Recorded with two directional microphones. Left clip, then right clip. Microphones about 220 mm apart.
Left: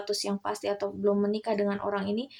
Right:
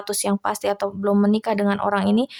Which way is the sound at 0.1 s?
35° right (ahead or behind).